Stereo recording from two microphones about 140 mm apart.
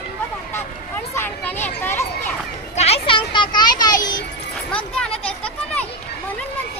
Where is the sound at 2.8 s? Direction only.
50° left (ahead or behind); by 3.9 s 30° left (ahead or behind).